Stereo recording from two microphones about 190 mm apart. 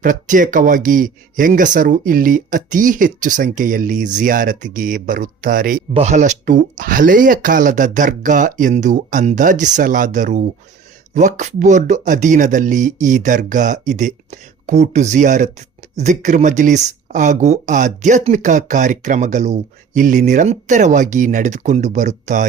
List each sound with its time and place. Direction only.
0.0 s speech: 45° right (ahead or behind)
5.9 s speech: 35° right (ahead or behind)